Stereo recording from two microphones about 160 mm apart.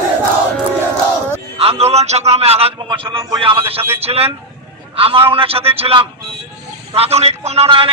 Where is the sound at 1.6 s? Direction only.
40° right (ahead or behind).